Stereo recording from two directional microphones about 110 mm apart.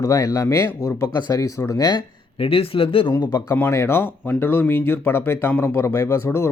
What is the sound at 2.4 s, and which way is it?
Speech, 55° left (ahead or behind).